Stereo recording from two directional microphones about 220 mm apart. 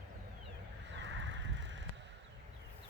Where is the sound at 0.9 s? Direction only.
55° right (ahead or behind).